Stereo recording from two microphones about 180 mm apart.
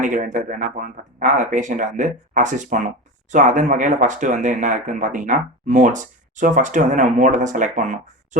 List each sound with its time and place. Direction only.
0.0 s speech: 45° right (ahead or behind)